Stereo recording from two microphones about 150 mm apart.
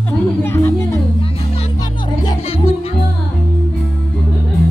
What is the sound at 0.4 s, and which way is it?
Music, 15° left (ahead or behind).